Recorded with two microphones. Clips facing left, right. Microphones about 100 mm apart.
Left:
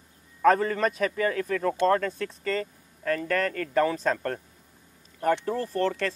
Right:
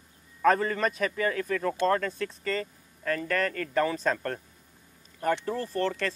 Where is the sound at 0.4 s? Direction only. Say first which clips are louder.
Left 2 dB; 50° left (ahead or behind).